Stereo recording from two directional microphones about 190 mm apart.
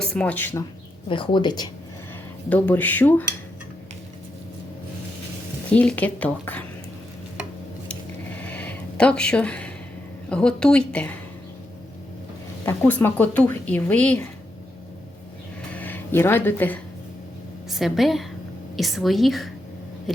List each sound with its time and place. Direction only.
0.0 s speech: 5° left (ahead or behind)
1.0 s speech: 25° left (ahead or behind)
2.5 s speech: 10° left (ahead or behind)
5.7 s speech: 5° left (ahead or behind)
7.9 s a sound: 5° left (ahead or behind)
10.2 s a woman's voice: 5° left (ahead or behind)
12.6 s speech: 10° left (ahead or behind)
15.7 s a sound: 10° left (ahead or behind)
17.7 s a woman's voice: centre (ahead or behind)
20.1 s a sound: centre (ahead or behind)